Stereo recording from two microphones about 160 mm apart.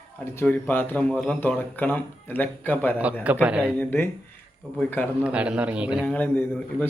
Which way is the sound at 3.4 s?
5° right (ahead or behind).